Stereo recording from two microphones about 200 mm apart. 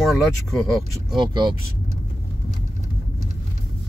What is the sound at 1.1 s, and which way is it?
Speech, 20° right (ahead or behind).